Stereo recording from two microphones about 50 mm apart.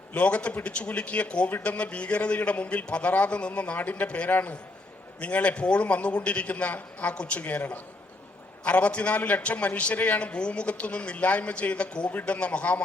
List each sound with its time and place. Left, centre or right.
0.1 s a man's voice: left